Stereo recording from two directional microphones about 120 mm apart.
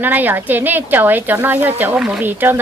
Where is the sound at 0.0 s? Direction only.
15° right (ahead or behind).